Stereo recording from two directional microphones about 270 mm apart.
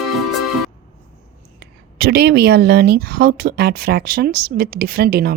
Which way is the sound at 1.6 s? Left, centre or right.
Right.